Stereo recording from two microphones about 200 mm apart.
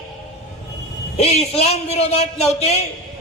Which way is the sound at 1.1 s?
30° left (ahead or behind).